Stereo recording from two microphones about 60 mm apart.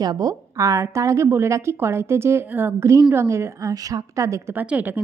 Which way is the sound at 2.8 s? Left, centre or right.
Right.